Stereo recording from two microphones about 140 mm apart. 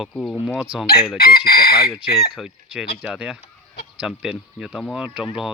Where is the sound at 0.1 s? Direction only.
Centre (ahead or behind).